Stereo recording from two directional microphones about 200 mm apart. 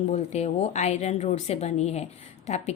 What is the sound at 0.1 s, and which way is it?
A woman's voice, 35° left (ahead or behind).